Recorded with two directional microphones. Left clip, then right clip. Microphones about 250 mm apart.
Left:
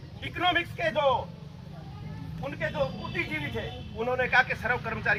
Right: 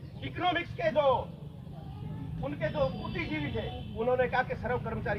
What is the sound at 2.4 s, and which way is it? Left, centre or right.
A man's voice, centre.